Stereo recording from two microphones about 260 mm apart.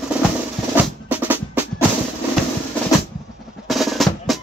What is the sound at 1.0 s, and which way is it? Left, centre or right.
Percussion, centre.